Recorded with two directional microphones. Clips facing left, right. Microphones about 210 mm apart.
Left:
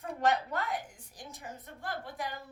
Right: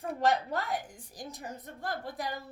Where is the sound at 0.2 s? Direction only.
35° right (ahead or behind).